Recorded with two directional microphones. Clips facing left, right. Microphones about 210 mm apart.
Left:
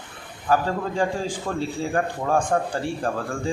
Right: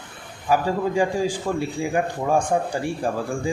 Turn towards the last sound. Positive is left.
turn(degrees=-10)  # may be behind; listen again after turning